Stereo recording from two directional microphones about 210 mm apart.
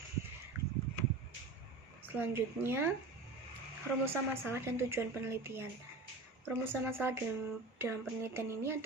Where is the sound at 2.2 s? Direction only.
10° right (ahead or behind).